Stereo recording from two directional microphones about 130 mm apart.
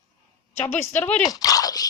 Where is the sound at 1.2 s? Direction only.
30° left (ahead or behind).